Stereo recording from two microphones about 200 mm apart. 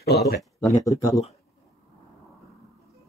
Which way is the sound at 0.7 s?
15° left (ahead or behind).